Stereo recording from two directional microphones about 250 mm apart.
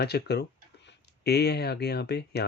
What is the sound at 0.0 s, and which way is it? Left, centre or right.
Speech, left.